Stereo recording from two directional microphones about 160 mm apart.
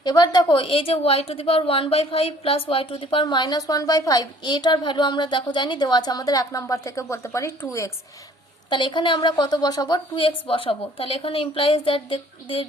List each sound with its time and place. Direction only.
0.0 s a woman's voice: 25° left (ahead or behind)
8.7 s a woman's voice: 30° left (ahead or behind)